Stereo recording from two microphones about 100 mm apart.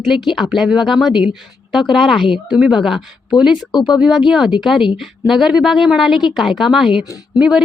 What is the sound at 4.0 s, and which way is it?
A woman's voice, 5° right (ahead or behind).